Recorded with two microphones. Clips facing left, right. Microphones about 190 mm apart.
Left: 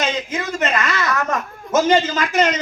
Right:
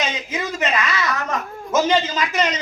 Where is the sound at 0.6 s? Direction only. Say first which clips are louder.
Left 1 dB; 50° left (ahead or behind).